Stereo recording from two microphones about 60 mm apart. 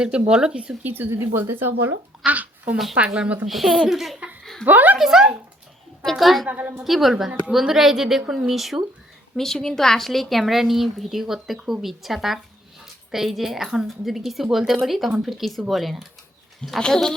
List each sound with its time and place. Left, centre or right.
0.0 s speech: centre
0.9 s a woman's voice: right
2.2 s a child's voice: right
3.4 s speech: centre
4.6 s a woman's voice: right
4.9 s speech: centre
6.0 s speech: centre
6.5 s speech: right
6.8 s speech: centre